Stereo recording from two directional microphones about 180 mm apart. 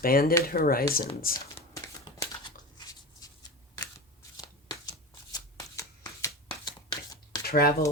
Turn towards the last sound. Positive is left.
turn(degrees=55)  # may be behind; listen again after turning